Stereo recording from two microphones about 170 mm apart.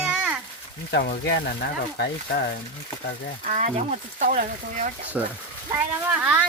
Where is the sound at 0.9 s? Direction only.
90° left.